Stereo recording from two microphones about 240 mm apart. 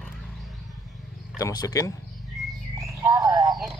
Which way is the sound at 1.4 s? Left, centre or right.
Centre.